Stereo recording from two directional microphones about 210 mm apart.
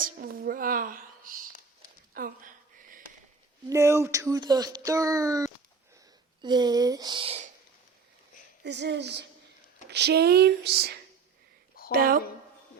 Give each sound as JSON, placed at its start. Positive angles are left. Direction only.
{"t": 0.0, "sound": "a sound", "side_deg": -45}
{"t": 3.7, "sound": "speech", "side_deg": -15}
{"t": 8.6, "sound": "speech", "side_deg": -55}